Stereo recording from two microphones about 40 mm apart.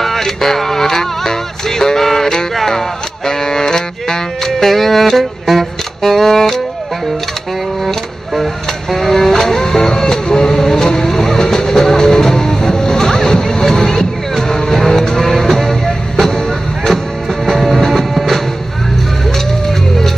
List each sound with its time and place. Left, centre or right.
0.0 s music: centre
8.9 s vehicle: centre
17.5 s music: centre